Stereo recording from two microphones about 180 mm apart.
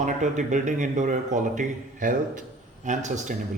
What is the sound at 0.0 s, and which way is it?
A man's voice, 45° right (ahead or behind).